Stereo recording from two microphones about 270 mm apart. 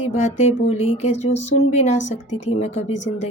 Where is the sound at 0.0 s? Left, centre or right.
Left.